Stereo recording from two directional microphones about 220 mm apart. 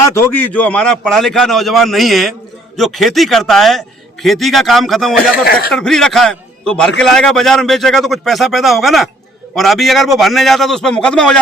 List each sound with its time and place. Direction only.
0.1 s a man's voice: 10° left (ahead or behind)
5.3 s speech: 40° left (ahead or behind)
5.7 s a man's voice: centre (ahead or behind)